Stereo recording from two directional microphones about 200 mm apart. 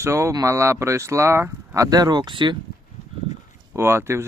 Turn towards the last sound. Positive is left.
turn(degrees=-15)  # may be behind; listen again after turning